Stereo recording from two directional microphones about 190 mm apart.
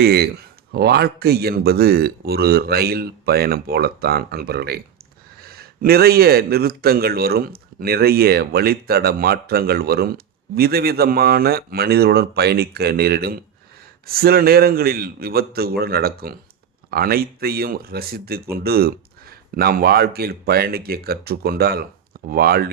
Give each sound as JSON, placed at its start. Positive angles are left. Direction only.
{"t": 0.0, "sound": "a man's voice", "side_deg": -55}